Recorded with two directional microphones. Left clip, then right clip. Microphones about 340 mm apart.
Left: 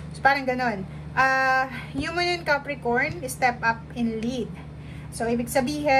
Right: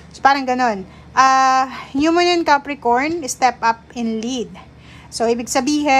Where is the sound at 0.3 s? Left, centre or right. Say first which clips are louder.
Right 7 dB; centre.